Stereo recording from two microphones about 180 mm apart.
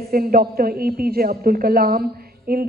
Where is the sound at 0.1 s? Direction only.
55° right (ahead or behind).